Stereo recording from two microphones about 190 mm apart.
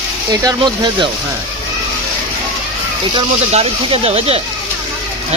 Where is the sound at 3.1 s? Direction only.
30° right (ahead or behind).